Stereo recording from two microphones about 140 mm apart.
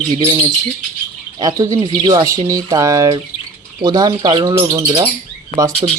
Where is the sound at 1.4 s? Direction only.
25° right (ahead or behind).